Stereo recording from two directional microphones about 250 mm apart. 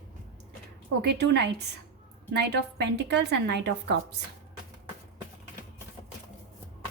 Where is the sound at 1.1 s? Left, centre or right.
Right.